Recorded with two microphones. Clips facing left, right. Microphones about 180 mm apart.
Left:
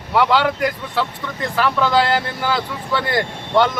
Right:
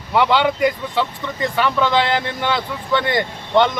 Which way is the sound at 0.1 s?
Centre (ahead or behind).